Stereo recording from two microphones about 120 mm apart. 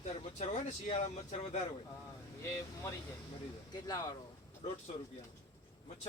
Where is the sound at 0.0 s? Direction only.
75° left (ahead or behind).